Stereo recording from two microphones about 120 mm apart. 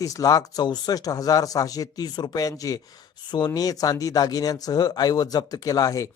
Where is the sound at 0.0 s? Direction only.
30° left (ahead or behind).